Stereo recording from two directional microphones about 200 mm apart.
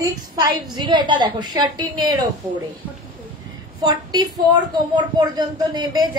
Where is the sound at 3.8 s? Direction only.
20° right (ahead or behind).